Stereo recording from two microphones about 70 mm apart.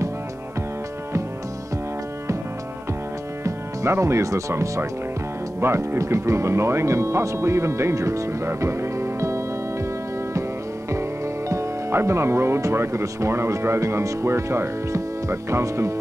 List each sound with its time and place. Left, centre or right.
3.4 s speech: right
10.9 s speech: right